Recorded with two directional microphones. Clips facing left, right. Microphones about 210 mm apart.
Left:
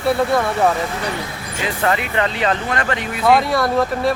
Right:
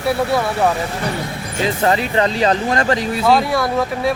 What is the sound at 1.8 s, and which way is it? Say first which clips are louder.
Speech: right 2 dB; 35° right (ahead or behind).